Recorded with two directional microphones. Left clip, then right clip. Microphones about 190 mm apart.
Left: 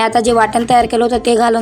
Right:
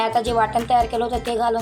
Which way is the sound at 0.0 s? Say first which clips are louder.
Left 7 dB; 40° left (ahead or behind).